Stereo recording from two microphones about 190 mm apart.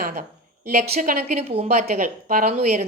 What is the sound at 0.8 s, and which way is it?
A woman's voice, 45° right (ahead or behind).